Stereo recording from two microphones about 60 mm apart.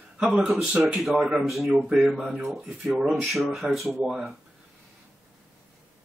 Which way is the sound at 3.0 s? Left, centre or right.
Centre.